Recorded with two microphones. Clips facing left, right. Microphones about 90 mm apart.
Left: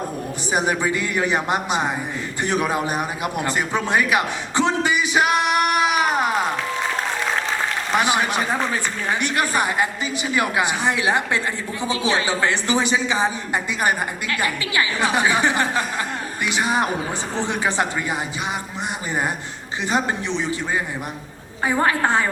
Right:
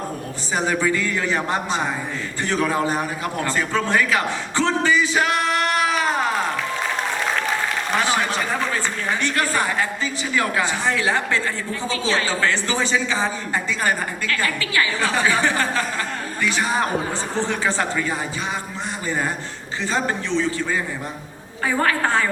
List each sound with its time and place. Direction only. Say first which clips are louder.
0.5 s a woman's voice: even; 15° left (ahead or behind)
7.9 s a woman's voice: left 2 dB; 15° left (ahead or behind)
19.8 s a woman's voice: left 1 dB; 15° left (ahead or behind)
21.6 s a woman's voice: left 1 dB; 20° left (ahead or behind)